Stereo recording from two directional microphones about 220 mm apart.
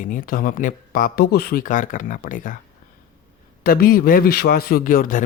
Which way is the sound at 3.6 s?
40° left (ahead or behind).